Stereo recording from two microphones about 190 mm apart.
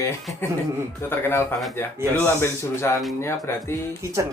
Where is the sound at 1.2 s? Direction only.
10° left (ahead or behind).